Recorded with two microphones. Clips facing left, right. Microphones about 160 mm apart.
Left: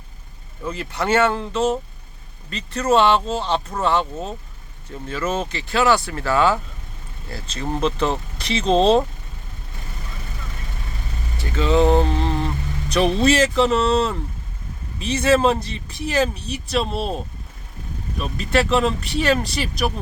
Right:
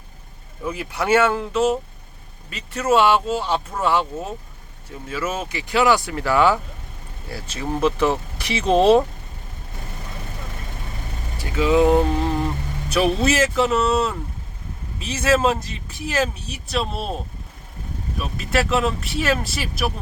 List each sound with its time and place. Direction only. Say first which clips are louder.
0.6 s speech: even; 10° right (ahead or behind)
11.3 s vehicle: right 1 dB; 10° right (ahead or behind)
12.9 s speech: left 2 dB; 5° right (ahead or behind)
18.2 s speech: left 2 dB; 5° right (ahead or behind)